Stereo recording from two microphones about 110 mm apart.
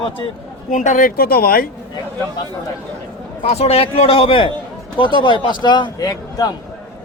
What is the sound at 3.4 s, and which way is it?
Speech, 70° left (ahead or behind).